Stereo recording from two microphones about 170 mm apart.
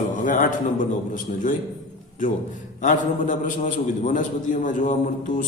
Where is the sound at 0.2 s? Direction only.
50° left (ahead or behind).